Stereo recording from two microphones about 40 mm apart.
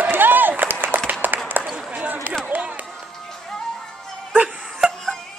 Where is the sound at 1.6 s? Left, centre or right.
Right.